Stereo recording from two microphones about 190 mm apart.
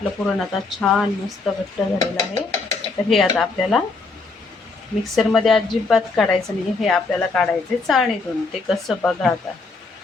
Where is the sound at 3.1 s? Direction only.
Centre (ahead or behind).